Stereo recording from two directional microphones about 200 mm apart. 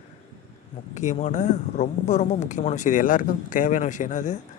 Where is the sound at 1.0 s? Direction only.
35° left (ahead or behind).